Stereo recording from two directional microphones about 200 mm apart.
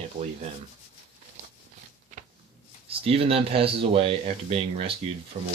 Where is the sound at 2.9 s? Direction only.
30° right (ahead or behind).